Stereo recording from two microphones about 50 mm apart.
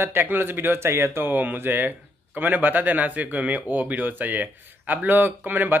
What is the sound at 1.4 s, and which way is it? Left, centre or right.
Speech, right.